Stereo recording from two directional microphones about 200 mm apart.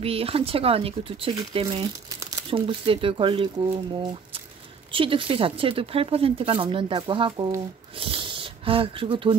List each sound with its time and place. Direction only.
0.0 s speech: 30° right (ahead or behind)